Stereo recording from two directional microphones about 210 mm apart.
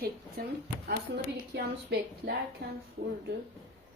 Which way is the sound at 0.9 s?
50° right (ahead or behind).